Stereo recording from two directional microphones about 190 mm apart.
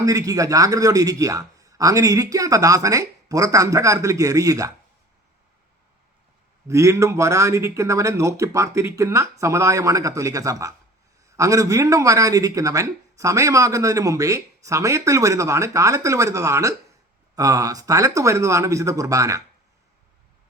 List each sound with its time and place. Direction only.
0.0 s speech: 20° right (ahead or behind)
6.7 s speech: 15° right (ahead or behind)